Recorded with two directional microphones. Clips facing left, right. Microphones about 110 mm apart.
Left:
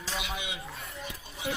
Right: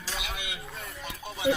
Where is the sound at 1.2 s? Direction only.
90° right.